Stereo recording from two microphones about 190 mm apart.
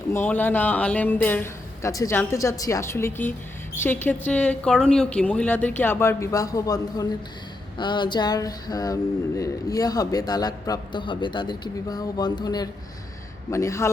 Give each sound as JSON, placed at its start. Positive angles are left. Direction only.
{"t": 0.1, "sound": "speech", "side_deg": 10}
{"t": 7.8, "sound": "a sound", "side_deg": 25}
{"t": 13.5, "sound": "speech", "side_deg": 15}